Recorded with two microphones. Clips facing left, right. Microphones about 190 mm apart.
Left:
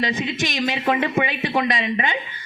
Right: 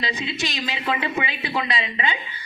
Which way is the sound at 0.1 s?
50° left (ahead or behind).